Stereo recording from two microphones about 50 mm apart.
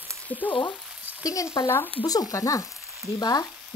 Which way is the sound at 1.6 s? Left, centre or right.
Left.